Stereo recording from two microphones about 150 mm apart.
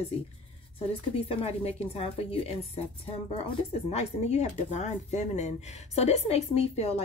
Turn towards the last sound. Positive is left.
turn(degrees=45)  # may be behind; listen again after turning